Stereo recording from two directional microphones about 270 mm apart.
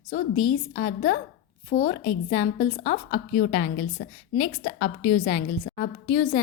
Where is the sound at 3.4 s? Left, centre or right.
Left.